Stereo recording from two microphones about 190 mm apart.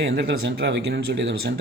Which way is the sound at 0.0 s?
55° right (ahead or behind).